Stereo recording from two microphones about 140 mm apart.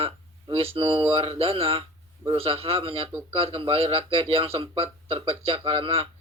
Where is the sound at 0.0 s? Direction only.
45° right (ahead or behind).